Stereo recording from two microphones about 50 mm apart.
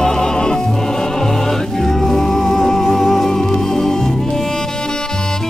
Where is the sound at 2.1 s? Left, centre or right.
Centre.